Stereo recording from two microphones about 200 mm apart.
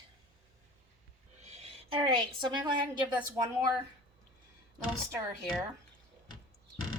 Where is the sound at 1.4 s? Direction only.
35° right (ahead or behind).